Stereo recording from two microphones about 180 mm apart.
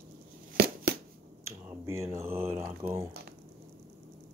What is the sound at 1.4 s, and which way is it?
Speech, 15° right (ahead or behind).